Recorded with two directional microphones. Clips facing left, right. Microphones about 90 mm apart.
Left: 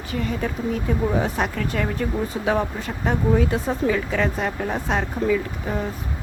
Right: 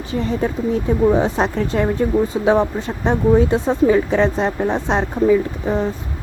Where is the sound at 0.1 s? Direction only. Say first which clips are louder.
Right 5 dB; 25° right (ahead or behind).